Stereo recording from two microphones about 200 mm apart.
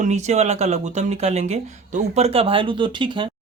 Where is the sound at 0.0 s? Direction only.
35° right (ahead or behind).